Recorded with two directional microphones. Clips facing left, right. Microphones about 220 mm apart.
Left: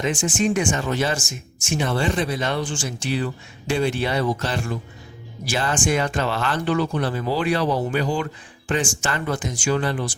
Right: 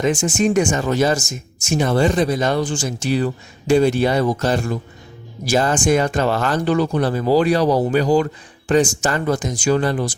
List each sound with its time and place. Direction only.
0.0 s speech: 40° right (ahead or behind)